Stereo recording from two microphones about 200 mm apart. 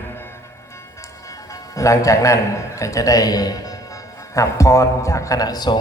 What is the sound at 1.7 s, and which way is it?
A man's voice, 15° left (ahead or behind).